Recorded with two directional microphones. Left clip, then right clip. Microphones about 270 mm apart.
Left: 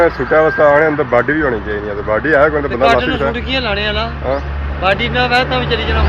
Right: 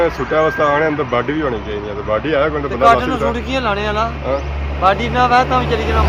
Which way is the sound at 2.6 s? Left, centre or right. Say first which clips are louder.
Even; centre.